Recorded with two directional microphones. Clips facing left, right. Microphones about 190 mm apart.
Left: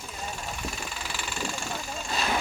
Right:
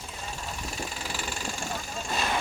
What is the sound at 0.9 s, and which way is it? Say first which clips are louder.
Vehicle: right 1 dB; 40° right (ahead or behind).